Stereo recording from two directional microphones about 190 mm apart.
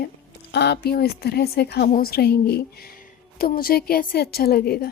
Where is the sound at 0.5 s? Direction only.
60° left (ahead or behind).